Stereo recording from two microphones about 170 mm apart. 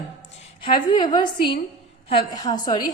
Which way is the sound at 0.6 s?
30° left (ahead or behind).